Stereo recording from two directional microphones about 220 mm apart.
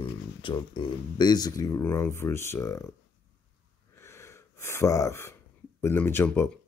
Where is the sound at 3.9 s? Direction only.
10° left (ahead or behind).